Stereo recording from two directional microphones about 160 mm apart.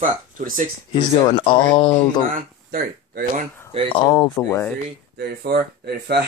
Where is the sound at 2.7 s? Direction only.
65° right (ahead or behind).